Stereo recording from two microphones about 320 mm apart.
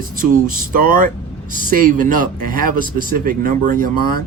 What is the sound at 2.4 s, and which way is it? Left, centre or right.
Speech, right.